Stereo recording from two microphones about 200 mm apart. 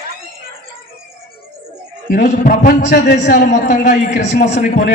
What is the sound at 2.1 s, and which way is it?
A man's voice, 45° left (ahead or behind).